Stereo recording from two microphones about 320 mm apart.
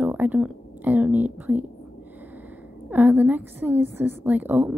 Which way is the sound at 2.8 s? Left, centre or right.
Centre.